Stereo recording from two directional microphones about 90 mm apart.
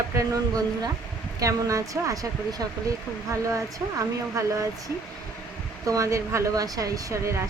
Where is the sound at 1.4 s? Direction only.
40° right (ahead or behind).